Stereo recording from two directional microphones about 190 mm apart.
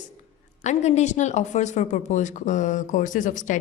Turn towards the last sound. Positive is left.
turn(degrees=45)  # may be behind; listen again after turning